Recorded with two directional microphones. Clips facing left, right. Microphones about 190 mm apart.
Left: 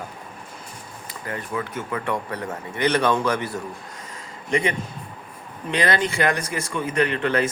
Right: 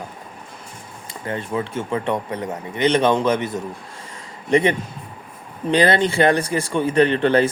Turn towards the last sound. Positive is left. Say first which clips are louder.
# right 6 dB
turn(degrees=-30)  # may be behind; listen again after turning